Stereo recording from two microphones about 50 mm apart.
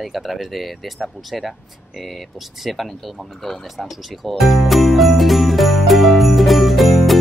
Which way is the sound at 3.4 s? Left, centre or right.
Centre.